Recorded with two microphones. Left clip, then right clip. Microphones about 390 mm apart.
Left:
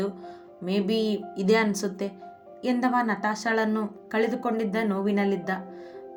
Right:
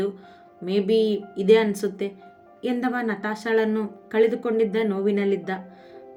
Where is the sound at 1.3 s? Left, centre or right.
Centre.